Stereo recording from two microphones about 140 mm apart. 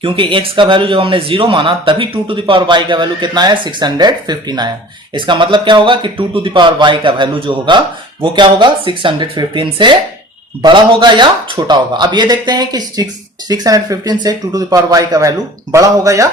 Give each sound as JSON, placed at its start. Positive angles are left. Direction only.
{"t": 0.0, "sound": "speech", "side_deg": -40}